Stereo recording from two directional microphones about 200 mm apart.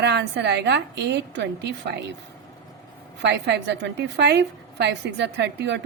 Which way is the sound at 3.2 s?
60° right (ahead or behind).